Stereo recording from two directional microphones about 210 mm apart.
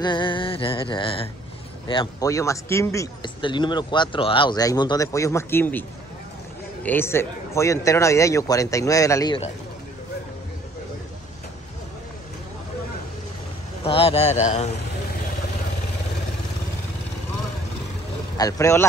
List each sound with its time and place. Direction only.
0.0 s music: 25° left (ahead or behind)
1.9 s speech: 20° left (ahead or behind)
13.8 s speech: 25° left (ahead or behind)
18.4 s speech: 15° left (ahead or behind)